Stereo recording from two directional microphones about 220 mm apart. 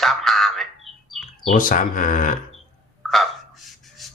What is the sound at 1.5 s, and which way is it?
Speech, 35° left (ahead or behind).